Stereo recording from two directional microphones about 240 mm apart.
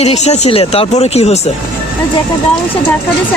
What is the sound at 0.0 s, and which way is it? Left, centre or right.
Speech, left.